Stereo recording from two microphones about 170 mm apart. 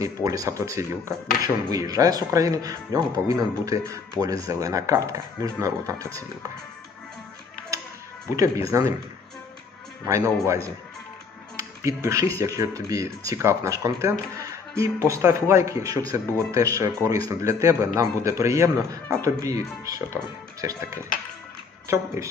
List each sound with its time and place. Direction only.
0.0 s speech: 20° right (ahead or behind)
8.4 s speech: 20° right (ahead or behind)
10.1 s speech: 15° right (ahead or behind)
22.2 s speech: 15° right (ahead or behind)